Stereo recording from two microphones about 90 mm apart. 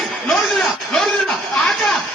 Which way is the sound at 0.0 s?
Centre (ahead or behind).